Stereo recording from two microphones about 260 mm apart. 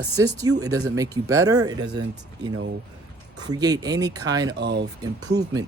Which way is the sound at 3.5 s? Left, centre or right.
Centre.